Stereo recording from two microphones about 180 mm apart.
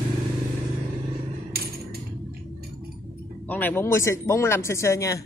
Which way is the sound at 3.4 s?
10° left (ahead or behind).